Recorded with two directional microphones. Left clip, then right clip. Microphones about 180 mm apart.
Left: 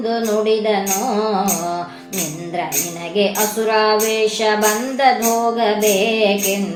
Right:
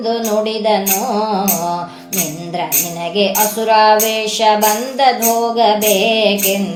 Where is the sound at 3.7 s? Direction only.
35° right (ahead or behind).